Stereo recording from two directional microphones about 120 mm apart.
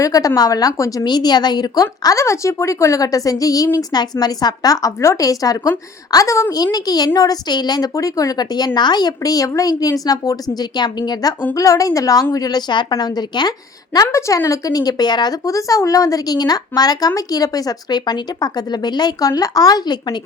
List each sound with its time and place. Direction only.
0.0 s speech: 30° left (ahead or behind)